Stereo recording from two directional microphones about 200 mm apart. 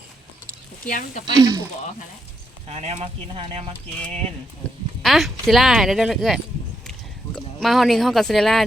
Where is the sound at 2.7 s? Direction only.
30° right (ahead or behind).